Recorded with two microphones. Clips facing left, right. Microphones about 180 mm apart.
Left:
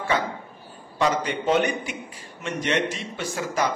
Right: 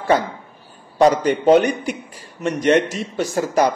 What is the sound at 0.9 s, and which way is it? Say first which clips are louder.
Speech: right 9 dB; 40° right (ahead or behind).